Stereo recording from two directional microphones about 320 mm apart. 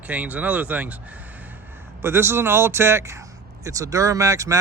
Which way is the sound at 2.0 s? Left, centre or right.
Centre.